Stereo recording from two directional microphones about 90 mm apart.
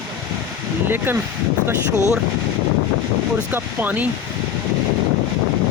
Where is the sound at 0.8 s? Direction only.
25° right (ahead or behind).